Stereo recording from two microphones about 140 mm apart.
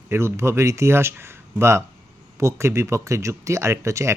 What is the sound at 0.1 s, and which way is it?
Speech, 20° right (ahead or behind).